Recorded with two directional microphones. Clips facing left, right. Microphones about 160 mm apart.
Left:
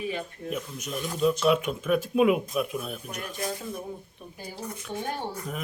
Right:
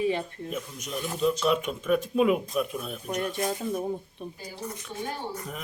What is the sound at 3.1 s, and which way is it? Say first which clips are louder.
Speech: right 8 dB; 35° right (ahead or behind).